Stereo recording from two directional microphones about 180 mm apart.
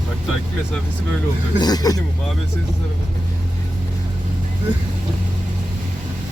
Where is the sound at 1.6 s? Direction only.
20° left (ahead or behind).